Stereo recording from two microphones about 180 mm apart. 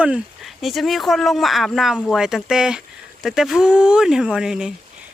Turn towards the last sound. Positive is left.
turn(degrees=-5)  # may be behind; listen again after turning